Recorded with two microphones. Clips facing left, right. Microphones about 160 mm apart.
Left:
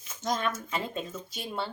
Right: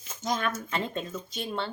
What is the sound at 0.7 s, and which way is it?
A woman's voice, 5° left (ahead or behind).